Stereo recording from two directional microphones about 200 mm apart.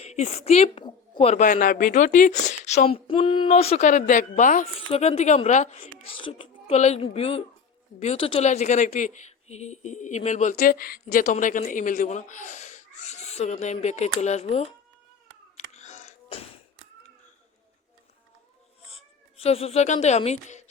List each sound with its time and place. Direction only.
0.0 s a woman's voice: 35° left (ahead or behind)
15.7 s music: 35° left (ahead or behind)
18.9 s speech: 30° left (ahead or behind)